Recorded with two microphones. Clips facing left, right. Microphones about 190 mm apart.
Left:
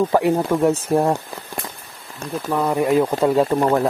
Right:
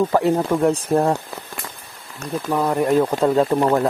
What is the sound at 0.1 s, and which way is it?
Speech, 15° left (ahead or behind).